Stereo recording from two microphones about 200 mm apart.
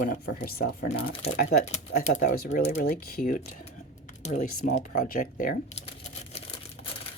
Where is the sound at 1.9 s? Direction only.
40° left (ahead or behind).